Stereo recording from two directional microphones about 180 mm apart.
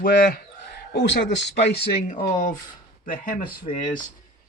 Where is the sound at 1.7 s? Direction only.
60° left (ahead or behind).